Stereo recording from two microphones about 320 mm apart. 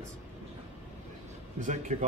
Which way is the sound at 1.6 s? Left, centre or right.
Right.